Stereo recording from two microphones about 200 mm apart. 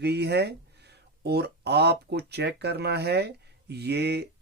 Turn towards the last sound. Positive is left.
turn(degrees=-55)  # may be behind; listen again after turning